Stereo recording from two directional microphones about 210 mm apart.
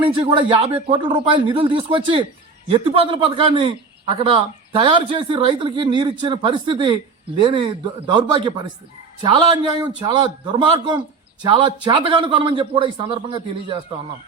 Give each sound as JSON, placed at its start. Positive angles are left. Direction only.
{"t": 0.0, "sound": "a man's voice", "side_deg": -25}